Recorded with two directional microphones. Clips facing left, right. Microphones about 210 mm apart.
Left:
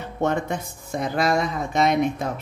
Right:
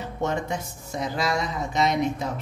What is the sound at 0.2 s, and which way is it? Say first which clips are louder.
Speech: left 4 dB; 55° left (ahead or behind).